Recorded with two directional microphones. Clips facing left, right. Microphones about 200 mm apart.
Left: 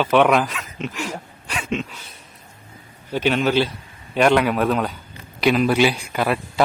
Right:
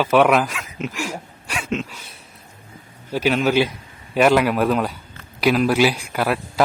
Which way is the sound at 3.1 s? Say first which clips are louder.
Right 1 dB; 5° right (ahead or behind).